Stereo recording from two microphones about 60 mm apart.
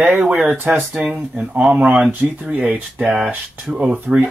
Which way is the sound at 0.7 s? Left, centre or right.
Right.